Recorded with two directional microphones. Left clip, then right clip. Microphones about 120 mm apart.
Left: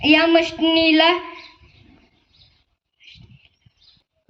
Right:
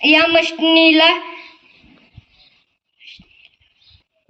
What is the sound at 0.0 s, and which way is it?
Child singing, 35° right (ahead or behind).